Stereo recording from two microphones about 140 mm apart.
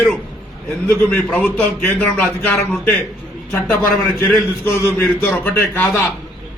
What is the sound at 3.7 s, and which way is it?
Speech, centre (ahead or behind).